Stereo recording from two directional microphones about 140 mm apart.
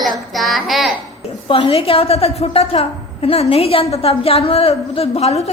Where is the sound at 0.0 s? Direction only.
Centre (ahead or behind).